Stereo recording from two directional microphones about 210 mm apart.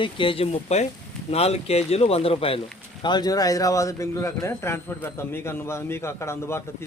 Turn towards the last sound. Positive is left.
turn(degrees=10)  # may be behind; listen again after turning